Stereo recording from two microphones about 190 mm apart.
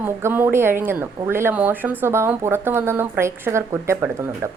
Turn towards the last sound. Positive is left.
turn(degrees=-15)  # may be behind; listen again after turning